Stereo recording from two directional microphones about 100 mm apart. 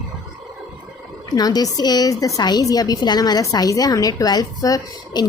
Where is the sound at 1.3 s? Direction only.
40° left (ahead or behind).